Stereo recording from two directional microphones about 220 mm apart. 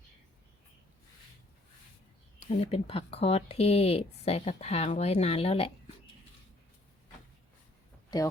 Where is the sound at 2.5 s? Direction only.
25° left (ahead or behind).